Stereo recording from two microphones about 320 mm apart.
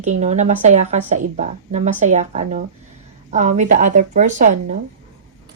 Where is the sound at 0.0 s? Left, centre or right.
Right.